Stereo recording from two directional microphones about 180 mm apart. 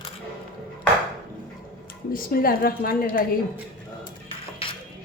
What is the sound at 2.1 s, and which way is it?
A woman's voice, 55° left (ahead or behind).